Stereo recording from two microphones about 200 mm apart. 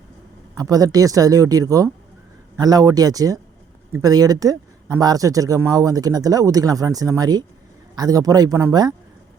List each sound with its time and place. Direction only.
0.5 s speech: 20° right (ahead or behind)